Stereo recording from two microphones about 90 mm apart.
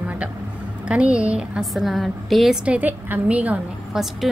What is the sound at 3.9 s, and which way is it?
Speech, 5° right (ahead or behind).